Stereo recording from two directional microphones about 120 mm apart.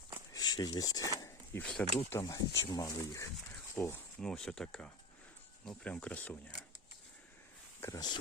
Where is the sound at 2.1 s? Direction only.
25° left (ahead or behind).